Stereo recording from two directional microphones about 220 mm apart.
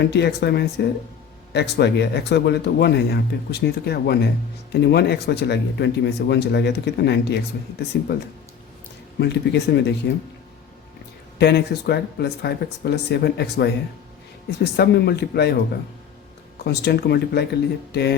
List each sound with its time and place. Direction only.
0.0 s speech: 50° left (ahead or behind)
9.2 s speech: 50° left (ahead or behind)
11.3 s speech: 50° left (ahead or behind)
16.6 s speech: 50° left (ahead or behind)